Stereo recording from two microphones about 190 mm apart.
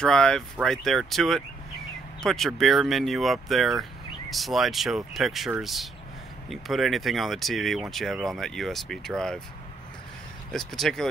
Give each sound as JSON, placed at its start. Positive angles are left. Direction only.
{"t": 0.0, "sound": "speech", "side_deg": 5}
{"t": 10.5, "sound": "speech", "side_deg": 0}